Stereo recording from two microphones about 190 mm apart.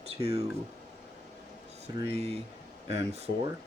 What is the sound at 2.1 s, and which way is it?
Speech, 35° right (ahead or behind).